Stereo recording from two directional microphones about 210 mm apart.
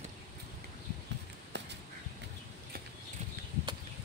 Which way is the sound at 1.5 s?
55° right (ahead or behind).